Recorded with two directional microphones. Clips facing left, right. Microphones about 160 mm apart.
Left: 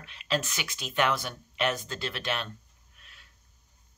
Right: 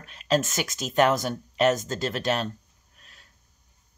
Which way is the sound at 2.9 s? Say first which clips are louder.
Right 2 dB; 40° right (ahead or behind).